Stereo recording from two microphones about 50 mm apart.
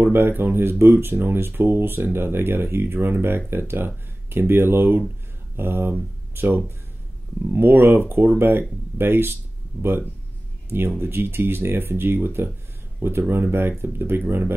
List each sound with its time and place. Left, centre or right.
0.0 s speech: right